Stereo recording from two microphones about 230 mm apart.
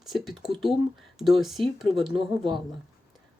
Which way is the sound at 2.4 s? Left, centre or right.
Right.